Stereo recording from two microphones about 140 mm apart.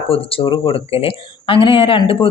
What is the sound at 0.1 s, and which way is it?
Speech, 40° left (ahead or behind).